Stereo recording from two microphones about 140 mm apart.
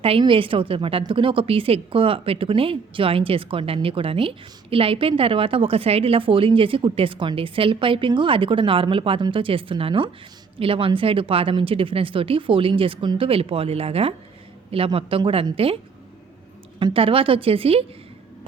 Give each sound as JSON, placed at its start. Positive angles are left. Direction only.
{"t": 0.0, "sound": "a woman's voice", "side_deg": -40}
{"t": 16.8, "sound": "a woman's voice", "side_deg": -40}